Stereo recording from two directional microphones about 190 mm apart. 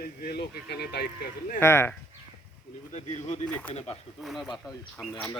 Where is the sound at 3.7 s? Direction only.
30° left (ahead or behind).